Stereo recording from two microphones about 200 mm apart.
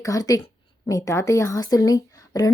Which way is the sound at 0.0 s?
15° left (ahead or behind).